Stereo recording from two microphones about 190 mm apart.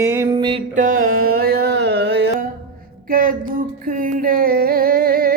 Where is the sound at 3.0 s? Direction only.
45° right (ahead or behind).